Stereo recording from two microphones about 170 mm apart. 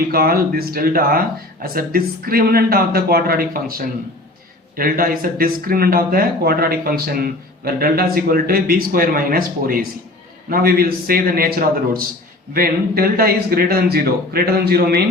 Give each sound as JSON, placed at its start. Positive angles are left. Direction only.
{"t": 0.1, "sound": "speech", "side_deg": -60}